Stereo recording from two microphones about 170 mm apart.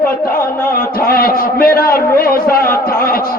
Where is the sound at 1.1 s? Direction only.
60° left (ahead or behind).